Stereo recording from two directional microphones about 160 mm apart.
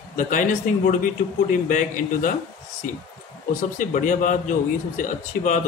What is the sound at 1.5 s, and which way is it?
Speech, 55° left (ahead or behind).